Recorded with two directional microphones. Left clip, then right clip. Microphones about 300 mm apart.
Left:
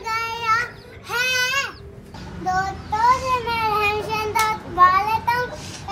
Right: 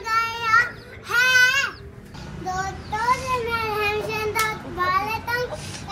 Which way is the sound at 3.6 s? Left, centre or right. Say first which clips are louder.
Left 3 dB; centre.